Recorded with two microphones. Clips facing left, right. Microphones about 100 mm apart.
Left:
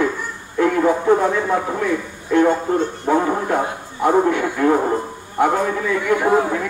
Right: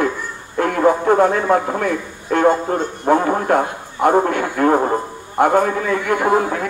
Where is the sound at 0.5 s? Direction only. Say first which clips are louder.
Right 1 dB; 55° right (ahead or behind).